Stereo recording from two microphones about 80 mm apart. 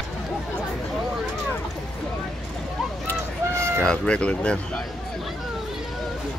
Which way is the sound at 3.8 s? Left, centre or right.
Centre.